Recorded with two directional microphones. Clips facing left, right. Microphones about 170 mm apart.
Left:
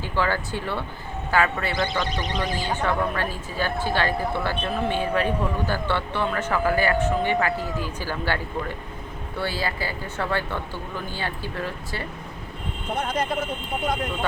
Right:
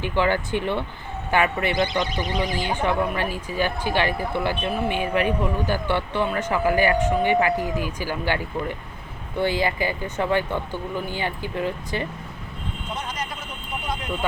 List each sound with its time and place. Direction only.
0.0 s speech: 20° right (ahead or behind)
9.4 s speech: 20° right (ahead or behind)
12.9 s speech: 55° left (ahead or behind)